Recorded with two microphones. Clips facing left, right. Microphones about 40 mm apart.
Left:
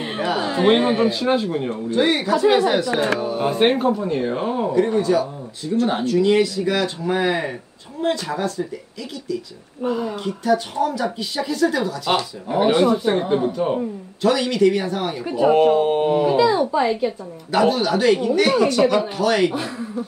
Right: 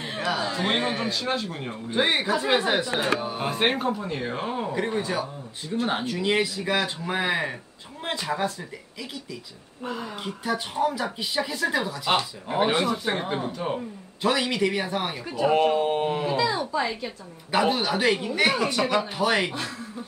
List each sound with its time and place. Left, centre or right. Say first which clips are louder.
0.4 s a man's voice: left 12 dB; left; by 1.7 s centre
1.9 s speech: left 4 dB; centre
4.7 s speech: left 11 dB; centre
9.8 s speech: left 10 dB; centre
10.1 s speech: left 9 dB; centre
12.5 s speech: left 7 dB; centre
14.2 s speech: left 7 dB; centre
15.2 s speech: left 7 dB; centre
17.5 s speech: left 5 dB; centre
19.1 s speech: left 5 dB; centre
19.5 s speech: left 7 dB; centre